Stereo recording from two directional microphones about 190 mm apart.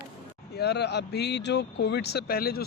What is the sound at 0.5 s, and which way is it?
Speech, 60° left (ahead or behind).